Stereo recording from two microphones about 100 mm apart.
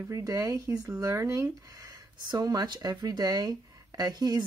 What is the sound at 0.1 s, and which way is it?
Speech, 35° right (ahead or behind).